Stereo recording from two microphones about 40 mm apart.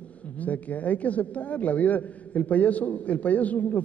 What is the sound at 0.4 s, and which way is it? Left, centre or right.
A man's voice, left.